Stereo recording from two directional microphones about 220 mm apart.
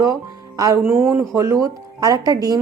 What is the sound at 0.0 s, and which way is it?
A woman's voice, 15° right (ahead or behind).